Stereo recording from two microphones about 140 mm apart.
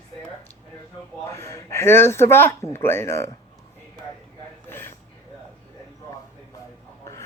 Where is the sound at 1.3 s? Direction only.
20° left (ahead or behind).